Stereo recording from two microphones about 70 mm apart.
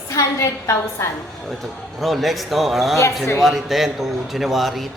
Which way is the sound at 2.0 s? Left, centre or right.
Centre.